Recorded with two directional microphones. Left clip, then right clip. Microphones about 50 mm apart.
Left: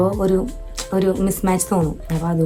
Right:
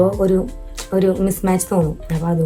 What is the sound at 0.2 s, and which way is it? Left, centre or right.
A woman's voice, left.